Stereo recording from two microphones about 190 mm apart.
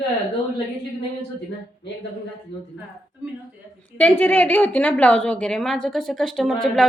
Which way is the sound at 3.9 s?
10° left (ahead or behind).